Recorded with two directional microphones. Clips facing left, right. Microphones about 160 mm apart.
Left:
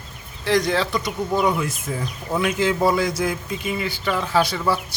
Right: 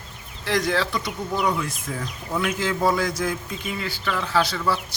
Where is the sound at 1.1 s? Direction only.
20° left (ahead or behind).